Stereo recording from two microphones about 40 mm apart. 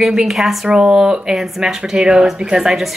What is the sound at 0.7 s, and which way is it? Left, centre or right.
A woman's voice, right.